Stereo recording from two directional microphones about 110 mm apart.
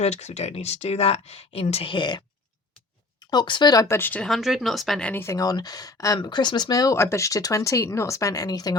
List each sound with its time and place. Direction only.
0.0 s speech: 90° left; by 2.2 s 45° left (ahead or behind)
3.2 s speech: 45° left (ahead or behind)
3.8 s speech: 20° left (ahead or behind)
4.2 s speech: centre (ahead or behind)
5.2 s speech: 30° left (ahead or behind)